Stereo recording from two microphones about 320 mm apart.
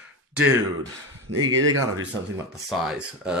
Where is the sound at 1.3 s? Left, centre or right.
Right.